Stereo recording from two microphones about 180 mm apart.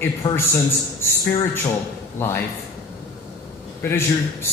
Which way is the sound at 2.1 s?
15° left (ahead or behind).